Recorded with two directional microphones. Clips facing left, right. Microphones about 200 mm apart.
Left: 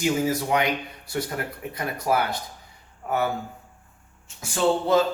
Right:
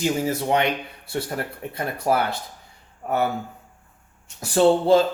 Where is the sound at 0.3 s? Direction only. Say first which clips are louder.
Right 2 dB; 25° right (ahead or behind).